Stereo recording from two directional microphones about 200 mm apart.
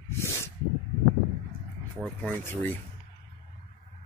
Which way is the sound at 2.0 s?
10° left (ahead or behind).